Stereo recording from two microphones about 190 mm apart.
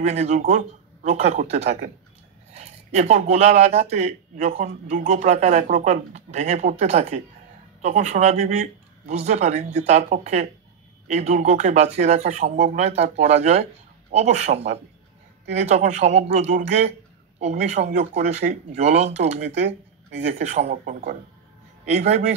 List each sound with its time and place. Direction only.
0.0 s a man's voice: 35° right (ahead or behind)